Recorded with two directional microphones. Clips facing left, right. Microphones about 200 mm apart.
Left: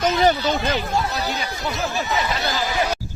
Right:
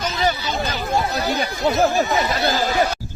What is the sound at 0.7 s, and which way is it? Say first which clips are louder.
Speech: right 1 dB; 45° right (ahead or behind).